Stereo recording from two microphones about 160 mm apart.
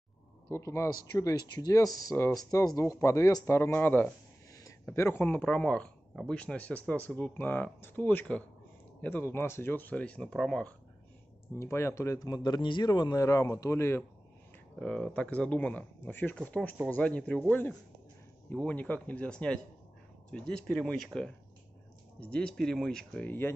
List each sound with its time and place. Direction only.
0.5 s speech: 20° left (ahead or behind)
11.5 s speech: 15° left (ahead or behind)
14.8 s speech: 5° left (ahead or behind)